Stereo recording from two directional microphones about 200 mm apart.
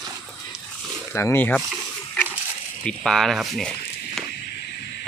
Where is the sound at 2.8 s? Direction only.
Centre (ahead or behind).